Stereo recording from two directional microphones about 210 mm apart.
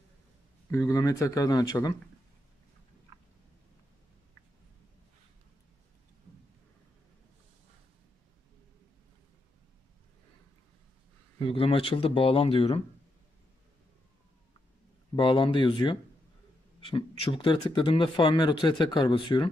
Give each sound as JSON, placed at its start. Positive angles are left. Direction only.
{"t": 0.7, "sound": "speech", "side_deg": 15}
{"t": 11.3, "sound": "speech", "side_deg": 25}
{"t": 15.1, "sound": "speech", "side_deg": 20}